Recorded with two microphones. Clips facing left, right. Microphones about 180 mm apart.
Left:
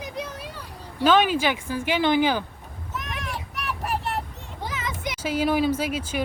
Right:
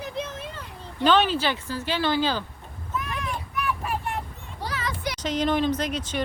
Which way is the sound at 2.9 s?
80° left.